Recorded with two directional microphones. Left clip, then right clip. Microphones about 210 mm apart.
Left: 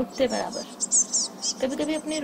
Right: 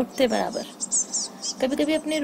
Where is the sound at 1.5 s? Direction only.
50° right (ahead or behind).